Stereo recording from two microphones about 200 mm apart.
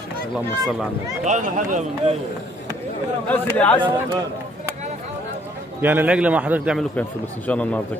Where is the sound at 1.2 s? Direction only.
40° right (ahead or behind).